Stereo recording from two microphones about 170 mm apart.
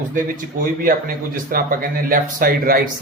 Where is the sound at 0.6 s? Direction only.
55° right (ahead or behind).